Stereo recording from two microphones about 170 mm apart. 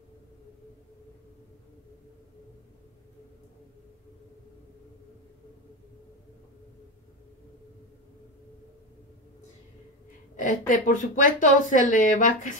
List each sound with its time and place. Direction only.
10.3 s a woman's voice: 50° left (ahead or behind)